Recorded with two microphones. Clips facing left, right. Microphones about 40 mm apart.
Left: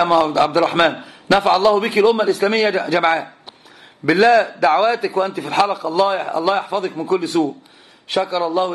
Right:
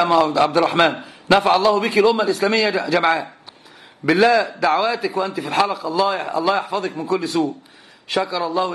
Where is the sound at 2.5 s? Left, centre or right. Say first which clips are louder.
Left 1 dB; left.